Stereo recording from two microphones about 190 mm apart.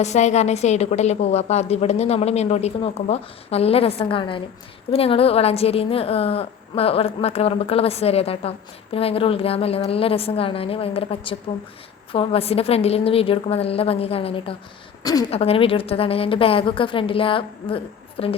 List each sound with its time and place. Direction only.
0.0 s a woman's voice: 35° left (ahead or behind); by 15.3 s 20° left (ahead or behind)
15.3 s a woman's voice: 30° left (ahead or behind)